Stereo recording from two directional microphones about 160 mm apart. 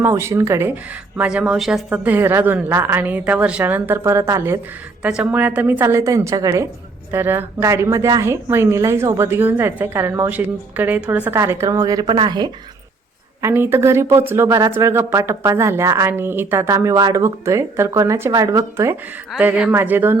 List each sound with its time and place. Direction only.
0.0 s speech: 15° right (ahead or behind)
13.4 s speech: 15° right (ahead or behind)
19.3 s speech: 5° right (ahead or behind)